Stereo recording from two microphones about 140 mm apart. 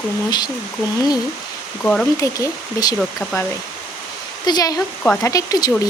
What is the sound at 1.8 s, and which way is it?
Speech, 5° left (ahead or behind).